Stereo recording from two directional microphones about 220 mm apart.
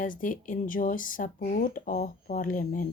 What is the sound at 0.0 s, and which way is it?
Speech, 35° left (ahead or behind).